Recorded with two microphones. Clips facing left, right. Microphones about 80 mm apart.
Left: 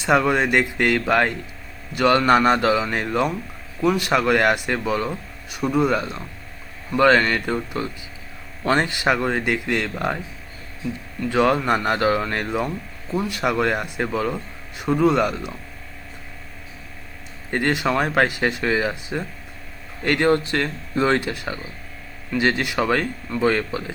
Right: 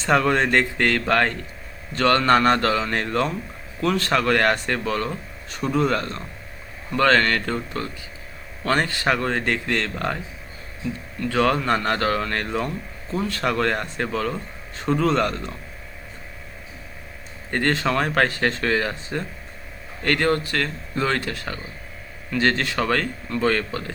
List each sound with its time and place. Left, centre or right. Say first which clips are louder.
0.0 s speech: left 1 dB; centre
11.2 s speech: left 2 dB; centre
17.5 s speech: left 1 dB; centre